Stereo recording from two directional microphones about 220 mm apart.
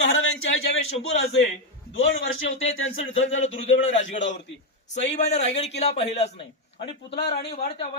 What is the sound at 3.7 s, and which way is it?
A man's voice, 30° left (ahead or behind).